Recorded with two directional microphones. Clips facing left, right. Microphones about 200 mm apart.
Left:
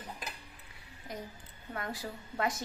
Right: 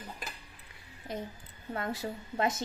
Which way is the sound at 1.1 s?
25° right (ahead or behind).